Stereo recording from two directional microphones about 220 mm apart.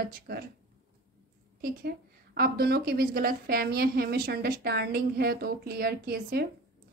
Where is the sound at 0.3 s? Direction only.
45° right (ahead or behind).